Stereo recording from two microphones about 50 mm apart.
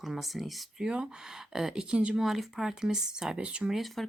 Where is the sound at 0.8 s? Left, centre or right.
Centre.